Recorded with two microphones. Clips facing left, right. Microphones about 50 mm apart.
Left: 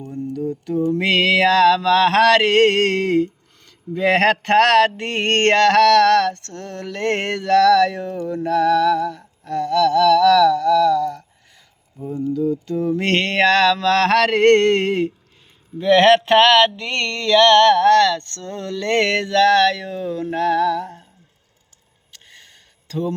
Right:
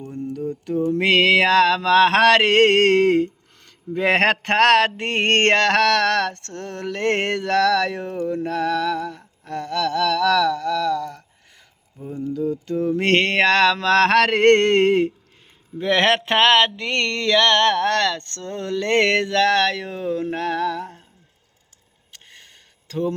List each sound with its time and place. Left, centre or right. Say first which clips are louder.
0.0 s mantra: left 2 dB; right
12.3 s mantra: left 2 dB; right
13.0 s mantra: right 1 dB; right
22.9 s speech: even; right